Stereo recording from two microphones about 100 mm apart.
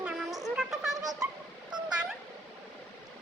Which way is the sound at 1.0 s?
40° right (ahead or behind).